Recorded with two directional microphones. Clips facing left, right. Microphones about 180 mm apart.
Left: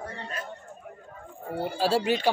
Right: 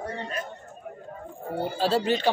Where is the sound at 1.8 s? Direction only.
10° left (ahead or behind).